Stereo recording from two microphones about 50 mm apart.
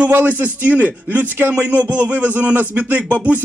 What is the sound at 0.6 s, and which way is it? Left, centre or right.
Speech, right.